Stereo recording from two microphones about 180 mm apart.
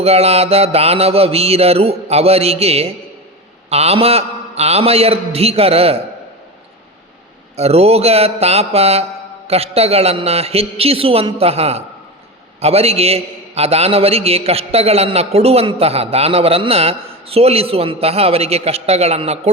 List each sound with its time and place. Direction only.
0.0 s a man's voice: 35° right (ahead or behind)
7.5 s a man's voice: 35° right (ahead or behind)